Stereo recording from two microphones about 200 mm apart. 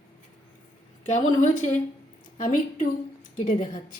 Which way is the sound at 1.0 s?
35° left (ahead or behind).